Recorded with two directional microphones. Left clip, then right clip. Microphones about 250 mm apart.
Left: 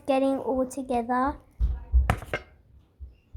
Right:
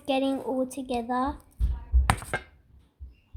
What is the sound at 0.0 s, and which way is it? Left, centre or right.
Speech, centre.